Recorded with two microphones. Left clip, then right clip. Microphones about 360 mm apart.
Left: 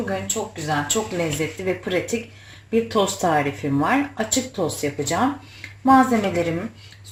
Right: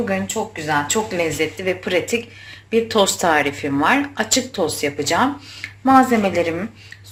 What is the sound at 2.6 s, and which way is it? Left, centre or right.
Speech, right.